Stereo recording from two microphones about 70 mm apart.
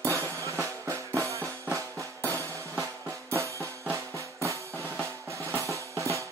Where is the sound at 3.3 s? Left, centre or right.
Right.